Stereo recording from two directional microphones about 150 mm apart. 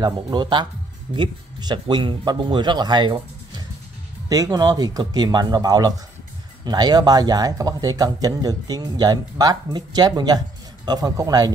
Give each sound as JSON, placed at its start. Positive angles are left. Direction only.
{"t": 0.0, "sound": "a man's voice", "side_deg": -30}